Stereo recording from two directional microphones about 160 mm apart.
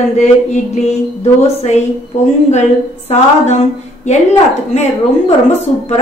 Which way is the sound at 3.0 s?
45° left (ahead or behind).